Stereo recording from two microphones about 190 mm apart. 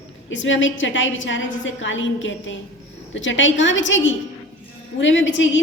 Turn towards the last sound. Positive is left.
turn(degrees=80)